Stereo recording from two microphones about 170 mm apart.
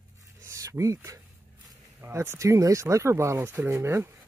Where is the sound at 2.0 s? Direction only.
15° right (ahead or behind).